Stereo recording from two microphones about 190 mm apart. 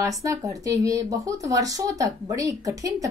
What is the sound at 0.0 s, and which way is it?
A woman's voice, 15° right (ahead or behind).